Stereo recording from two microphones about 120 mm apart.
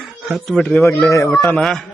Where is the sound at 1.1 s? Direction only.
25° left (ahead or behind).